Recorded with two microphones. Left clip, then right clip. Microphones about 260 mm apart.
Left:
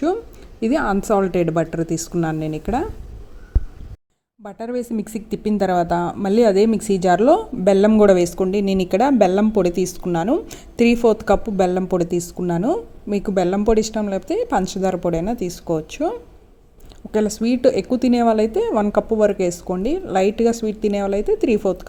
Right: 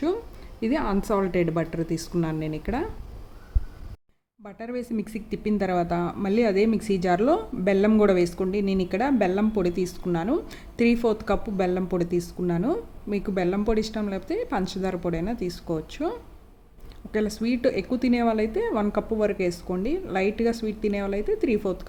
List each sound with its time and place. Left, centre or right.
0.6 s speech: centre
4.4 s speech: centre